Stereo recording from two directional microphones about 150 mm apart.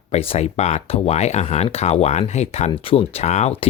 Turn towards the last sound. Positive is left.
turn(degrees=45)  # may be behind; listen again after turning